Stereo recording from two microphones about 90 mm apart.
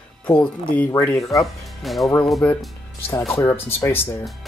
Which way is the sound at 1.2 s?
40° left (ahead or behind).